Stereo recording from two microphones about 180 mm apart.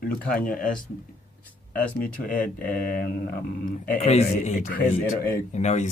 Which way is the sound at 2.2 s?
50° left (ahead or behind).